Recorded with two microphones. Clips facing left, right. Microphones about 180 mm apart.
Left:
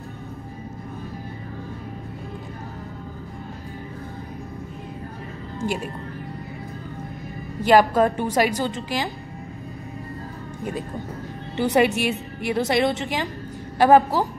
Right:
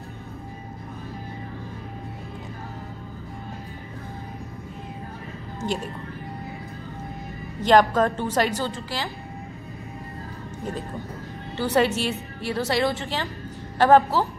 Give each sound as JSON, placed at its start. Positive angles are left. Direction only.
{"t": 7.6, "sound": "a woman's voice", "side_deg": 10}
{"t": 11.5, "sound": "a woman's voice", "side_deg": 15}